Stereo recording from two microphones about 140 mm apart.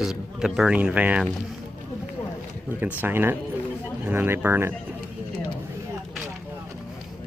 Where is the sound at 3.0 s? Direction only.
15° right (ahead or behind).